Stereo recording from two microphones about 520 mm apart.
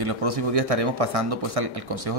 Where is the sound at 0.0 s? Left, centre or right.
Right.